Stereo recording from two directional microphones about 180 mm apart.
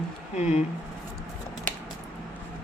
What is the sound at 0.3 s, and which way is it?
Speech, 40° left (ahead or behind).